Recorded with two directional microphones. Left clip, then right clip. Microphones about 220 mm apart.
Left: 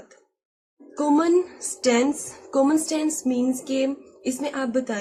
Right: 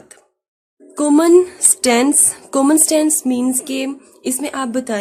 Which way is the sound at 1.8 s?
50° right (ahead or behind).